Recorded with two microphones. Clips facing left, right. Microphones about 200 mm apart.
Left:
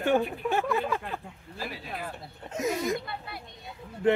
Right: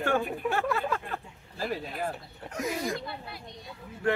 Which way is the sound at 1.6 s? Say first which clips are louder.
Right 5 dB; 45° right (ahead or behind).